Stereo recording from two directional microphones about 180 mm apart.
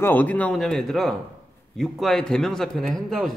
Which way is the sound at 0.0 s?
10° left (ahead or behind).